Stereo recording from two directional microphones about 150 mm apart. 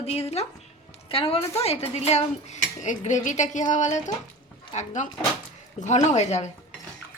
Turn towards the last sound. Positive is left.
turn(degrees=50)  # may be behind; listen again after turning